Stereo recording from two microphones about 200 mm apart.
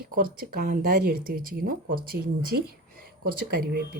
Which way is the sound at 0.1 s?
45° right (ahead or behind).